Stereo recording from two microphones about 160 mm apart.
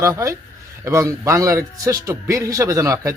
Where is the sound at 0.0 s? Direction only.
20° right (ahead or behind).